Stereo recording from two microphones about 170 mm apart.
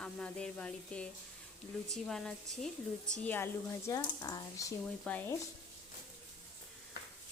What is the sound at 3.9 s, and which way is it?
Speech, 20° left (ahead or behind).